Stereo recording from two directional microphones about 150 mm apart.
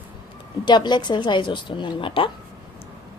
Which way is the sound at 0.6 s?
30° left (ahead or behind).